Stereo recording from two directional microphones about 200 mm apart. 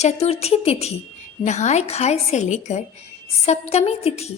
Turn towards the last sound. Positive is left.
turn(degrees=30)  # may be behind; listen again after turning